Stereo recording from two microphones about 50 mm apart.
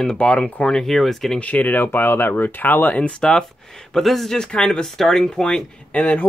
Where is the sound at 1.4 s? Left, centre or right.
Left.